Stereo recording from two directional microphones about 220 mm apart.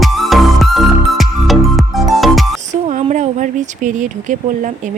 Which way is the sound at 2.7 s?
30° right (ahead or behind).